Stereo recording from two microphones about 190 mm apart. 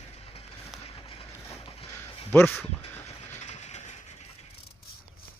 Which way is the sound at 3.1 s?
35° left (ahead or behind).